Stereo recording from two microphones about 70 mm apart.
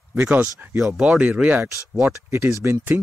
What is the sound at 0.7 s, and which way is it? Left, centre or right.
Speech, centre.